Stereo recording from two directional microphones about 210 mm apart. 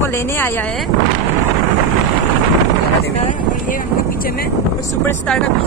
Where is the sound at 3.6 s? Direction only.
40° left (ahead or behind).